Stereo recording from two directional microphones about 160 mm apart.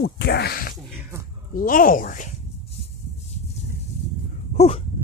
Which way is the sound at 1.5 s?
60° left (ahead or behind).